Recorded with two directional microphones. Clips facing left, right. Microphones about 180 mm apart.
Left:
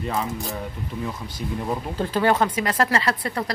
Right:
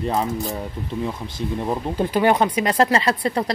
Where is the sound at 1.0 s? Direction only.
25° right (ahead or behind).